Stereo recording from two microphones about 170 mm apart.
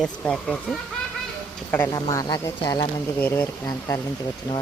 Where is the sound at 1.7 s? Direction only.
15° left (ahead or behind).